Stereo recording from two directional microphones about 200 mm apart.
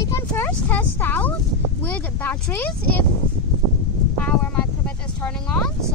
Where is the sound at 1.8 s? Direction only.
10° left (ahead or behind).